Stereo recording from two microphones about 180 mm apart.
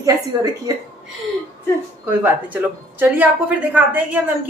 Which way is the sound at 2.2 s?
10° right (ahead or behind).